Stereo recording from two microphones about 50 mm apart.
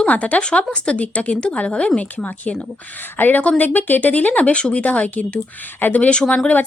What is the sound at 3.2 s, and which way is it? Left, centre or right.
Speech, left.